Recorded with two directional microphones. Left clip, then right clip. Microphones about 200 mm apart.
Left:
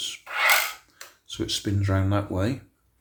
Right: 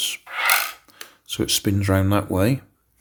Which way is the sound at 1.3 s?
45° right (ahead or behind).